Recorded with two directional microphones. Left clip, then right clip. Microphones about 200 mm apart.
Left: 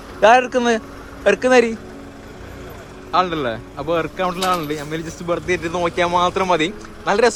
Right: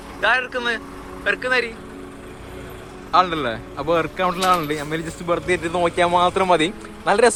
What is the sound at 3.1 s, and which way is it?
Speech, 15° left (ahead or behind).